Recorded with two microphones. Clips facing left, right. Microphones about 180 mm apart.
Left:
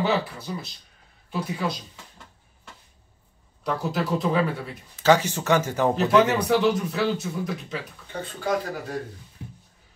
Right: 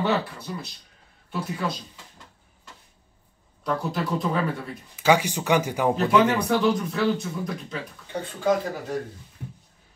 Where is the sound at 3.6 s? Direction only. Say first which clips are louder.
Even; centre (ahead or behind).